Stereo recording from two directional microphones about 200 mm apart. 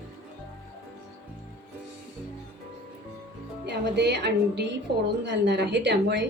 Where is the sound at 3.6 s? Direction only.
60° right (ahead or behind).